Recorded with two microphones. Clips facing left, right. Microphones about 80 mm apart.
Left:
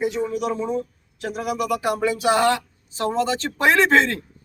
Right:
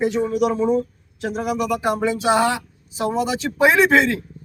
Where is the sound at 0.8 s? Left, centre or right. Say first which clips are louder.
Right 4 dB; right.